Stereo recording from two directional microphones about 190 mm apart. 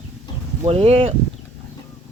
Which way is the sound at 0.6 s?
30° right (ahead or behind).